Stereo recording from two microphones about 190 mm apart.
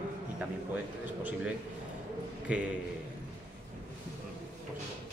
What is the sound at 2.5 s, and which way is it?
Speech, 5° right (ahead or behind).